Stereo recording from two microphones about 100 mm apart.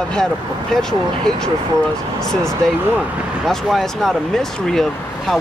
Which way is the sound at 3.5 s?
Centre (ahead or behind).